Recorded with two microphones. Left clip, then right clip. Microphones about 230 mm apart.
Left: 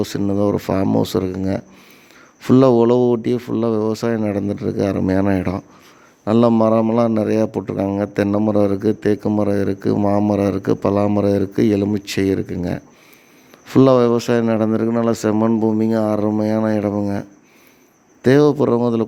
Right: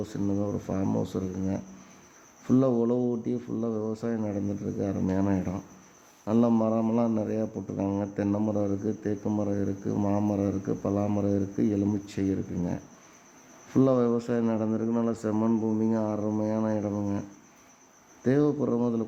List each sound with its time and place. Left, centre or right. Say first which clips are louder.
0.0 s a man's voice: left 12 dB; left
18.2 s a man's voice: left 12 dB; left